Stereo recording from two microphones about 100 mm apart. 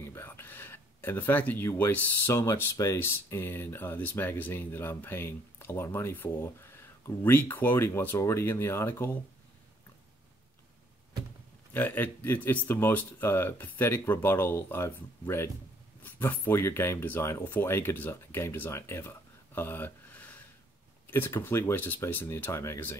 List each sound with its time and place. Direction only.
0.0 s speech: 25° left (ahead or behind)
11.7 s speech: 20° left (ahead or behind)